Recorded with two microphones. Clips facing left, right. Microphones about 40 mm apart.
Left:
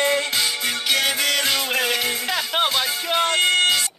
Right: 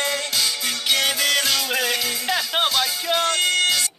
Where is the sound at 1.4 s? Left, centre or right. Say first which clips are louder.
Left 1 dB; left.